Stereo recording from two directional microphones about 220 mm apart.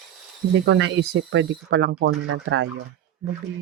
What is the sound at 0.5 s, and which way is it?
Speech, 55° right (ahead or behind).